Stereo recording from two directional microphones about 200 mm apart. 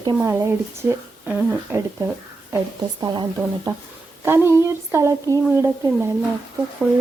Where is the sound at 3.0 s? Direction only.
20° right (ahead or behind).